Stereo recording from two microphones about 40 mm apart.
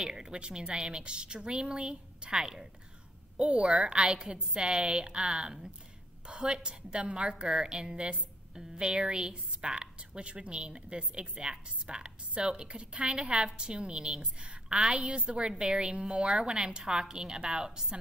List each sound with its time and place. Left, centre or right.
0.0 s a woman's voice: centre
3.3 s a woman's voice: right